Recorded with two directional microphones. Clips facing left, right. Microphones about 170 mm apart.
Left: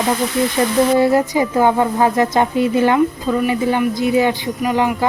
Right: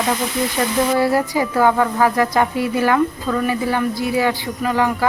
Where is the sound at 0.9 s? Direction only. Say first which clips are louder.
Left 3 dB; 20° left (ahead or behind).